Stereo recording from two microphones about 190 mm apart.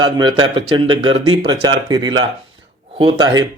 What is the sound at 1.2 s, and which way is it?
Speech, 80° right.